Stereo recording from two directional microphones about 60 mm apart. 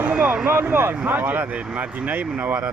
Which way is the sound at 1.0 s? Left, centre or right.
Right.